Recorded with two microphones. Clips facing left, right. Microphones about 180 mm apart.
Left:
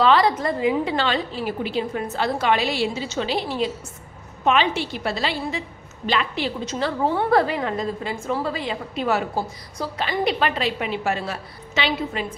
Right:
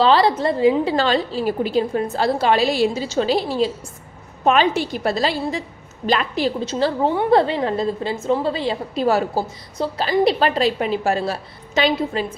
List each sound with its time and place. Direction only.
0.0 s a woman's voice: 30° right (ahead or behind)
7.1 s a woman's voice: 15° right (ahead or behind)
7.3 s a woman's voice: 25° right (ahead or behind)